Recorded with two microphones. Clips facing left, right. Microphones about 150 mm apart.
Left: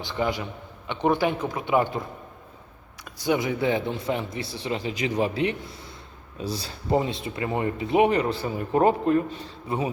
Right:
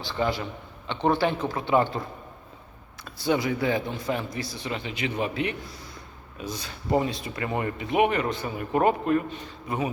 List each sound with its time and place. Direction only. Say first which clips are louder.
0.0 s speech: even; 20° left (ahead or behind)